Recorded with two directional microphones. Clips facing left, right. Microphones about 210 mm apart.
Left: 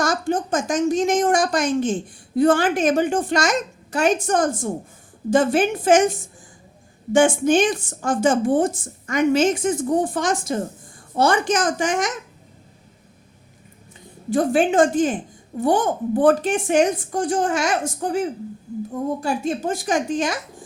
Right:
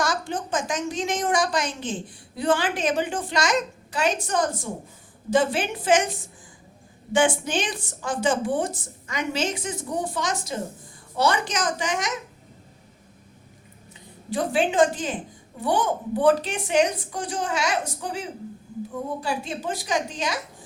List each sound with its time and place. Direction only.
0.0 s a woman's voice: 45° left (ahead or behind)
14.3 s a woman's voice: 45° left (ahead or behind)